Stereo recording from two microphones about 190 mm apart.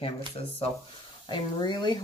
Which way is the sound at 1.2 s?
25° left (ahead or behind).